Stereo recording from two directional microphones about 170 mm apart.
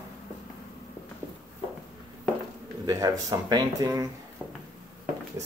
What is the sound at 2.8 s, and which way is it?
Speech, 20° right (ahead or behind).